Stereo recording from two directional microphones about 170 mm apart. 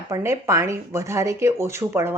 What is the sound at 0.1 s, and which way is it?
Speech, 15° right (ahead or behind).